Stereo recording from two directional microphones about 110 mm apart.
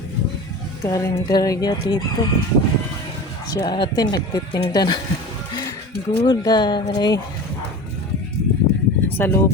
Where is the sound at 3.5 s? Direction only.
40° left (ahead or behind).